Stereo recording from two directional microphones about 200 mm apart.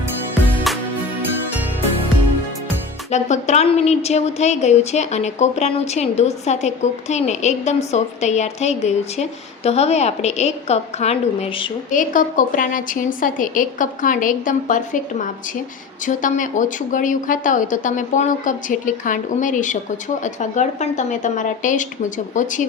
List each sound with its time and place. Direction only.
0.7 s music: centre (ahead or behind)
3.1 s a woman's voice: 35° left (ahead or behind)
11.9 s a woman's voice: 40° left (ahead or behind)